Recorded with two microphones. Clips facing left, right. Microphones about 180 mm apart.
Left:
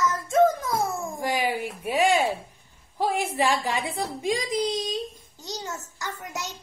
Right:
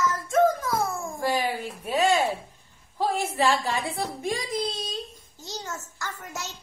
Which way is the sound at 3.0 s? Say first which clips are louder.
Even; 15° left (ahead or behind).